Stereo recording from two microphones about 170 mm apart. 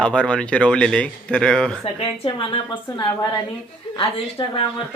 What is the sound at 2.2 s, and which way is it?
A woman's voice, 30° left (ahead or behind).